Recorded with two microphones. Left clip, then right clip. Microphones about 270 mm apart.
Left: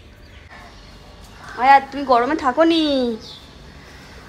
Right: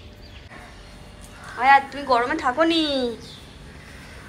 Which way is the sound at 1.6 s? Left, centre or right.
Centre.